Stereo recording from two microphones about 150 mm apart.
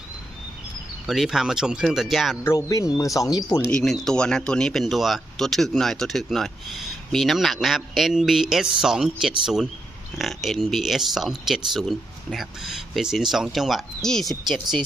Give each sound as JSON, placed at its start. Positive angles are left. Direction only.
{"t": 1.0, "sound": "speech", "side_deg": 0}
{"t": 2.4, "sound": "speech", "side_deg": 20}
{"t": 3.7, "sound": "speech", "side_deg": 5}